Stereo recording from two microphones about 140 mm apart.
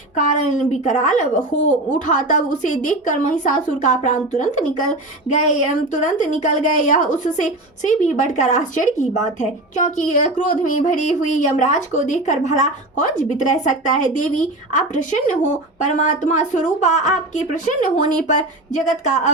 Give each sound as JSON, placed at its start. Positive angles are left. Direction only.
{"t": 0.2, "sound": "speech", "side_deg": 60}